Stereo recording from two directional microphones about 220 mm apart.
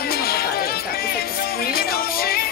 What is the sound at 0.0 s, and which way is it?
Music, 45° left (ahead or behind).